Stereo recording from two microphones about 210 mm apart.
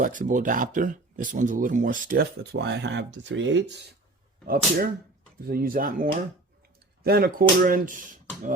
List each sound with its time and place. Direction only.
0.0 s speech: 40° right (ahead or behind); by 3.8 s 60° right (ahead or behind)
4.4 s speech: 45° right (ahead or behind)